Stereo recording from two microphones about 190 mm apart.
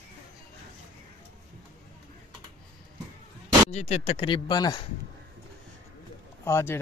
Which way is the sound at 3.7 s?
35° left (ahead or behind).